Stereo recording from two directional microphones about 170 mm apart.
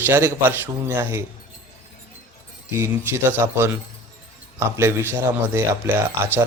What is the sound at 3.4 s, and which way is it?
Speech, 15° right (ahead or behind).